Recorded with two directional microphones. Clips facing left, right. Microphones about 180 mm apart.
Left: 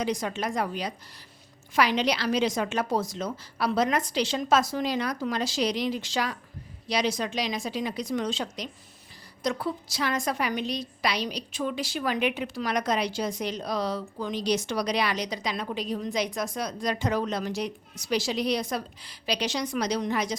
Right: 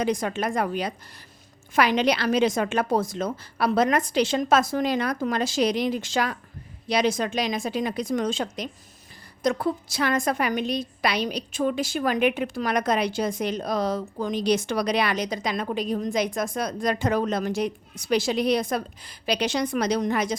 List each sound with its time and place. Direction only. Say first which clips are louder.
0.0 s a woman's voice: right 4 dB; 55° right (ahead or behind)